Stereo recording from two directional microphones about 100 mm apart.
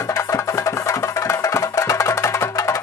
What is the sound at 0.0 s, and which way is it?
Music, 30° left (ahead or behind).